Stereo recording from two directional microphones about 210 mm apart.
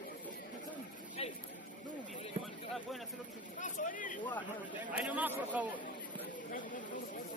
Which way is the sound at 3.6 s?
40° left (ahead or behind).